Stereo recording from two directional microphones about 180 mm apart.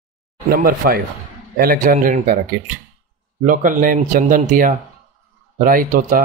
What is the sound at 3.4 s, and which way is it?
A man's voice, 50° right (ahead or behind).